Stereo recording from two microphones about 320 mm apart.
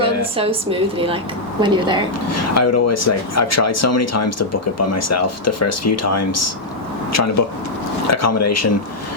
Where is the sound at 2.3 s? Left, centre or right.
Left.